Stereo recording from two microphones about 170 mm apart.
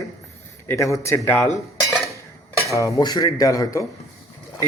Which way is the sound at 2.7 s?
20° left (ahead or behind).